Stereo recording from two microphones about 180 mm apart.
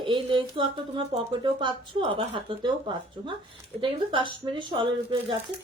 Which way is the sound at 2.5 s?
30° right (ahead or behind).